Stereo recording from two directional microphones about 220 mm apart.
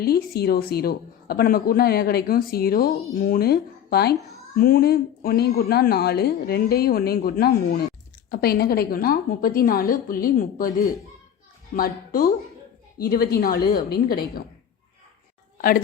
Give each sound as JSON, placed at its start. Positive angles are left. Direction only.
{"t": 0.0, "sound": "a woman's voice", "side_deg": 45}
{"t": 11.7, "sound": "a woman's voice", "side_deg": 40}
{"t": 15.5, "sound": "a woman's voice", "side_deg": 40}